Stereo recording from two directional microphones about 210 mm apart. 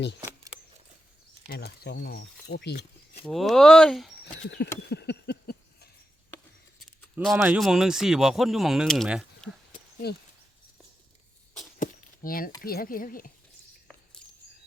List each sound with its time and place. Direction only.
0.2 s keys jangling: 15° right (ahead or behind)
1.5 s speech: 50° left (ahead or behind)
3.2 s speech: centre (ahead or behind)
4.4 s speech: 50° left (ahead or behind)
4.8 s a sound: 55° left (ahead or behind)
6.8 s speech: centre (ahead or behind)
10.0 s speech: 50° left (ahead or behind)
11.8 s a sound: 45° left (ahead or behind)
12.6 s speech: 45° left (ahead or behind)